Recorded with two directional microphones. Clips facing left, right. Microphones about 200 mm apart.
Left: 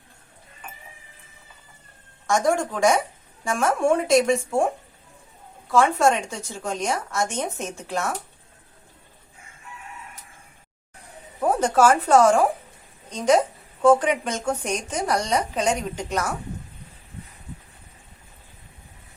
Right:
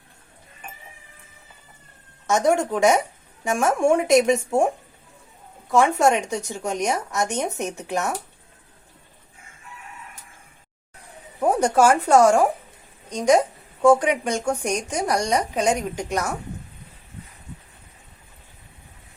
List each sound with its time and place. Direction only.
2.2 s a woman's voice: 20° right (ahead or behind)
5.7 s a woman's voice: 15° right (ahead or behind)
11.3 s a woman's voice: 15° right (ahead or behind)